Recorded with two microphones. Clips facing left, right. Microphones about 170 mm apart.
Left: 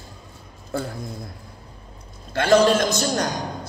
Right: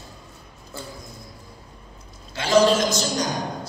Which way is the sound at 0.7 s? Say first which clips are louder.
Left 10 dB; 60° left (ahead or behind).